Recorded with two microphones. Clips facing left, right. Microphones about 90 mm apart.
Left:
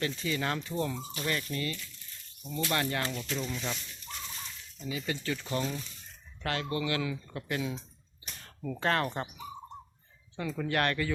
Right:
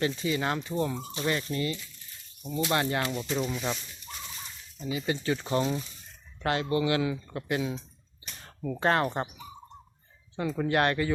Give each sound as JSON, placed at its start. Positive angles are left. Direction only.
{"t": 0.0, "sound": "speech", "side_deg": -15}
{"t": 8.4, "sound": "a sound", "side_deg": -20}
{"t": 10.3, "sound": "speech", "side_deg": -20}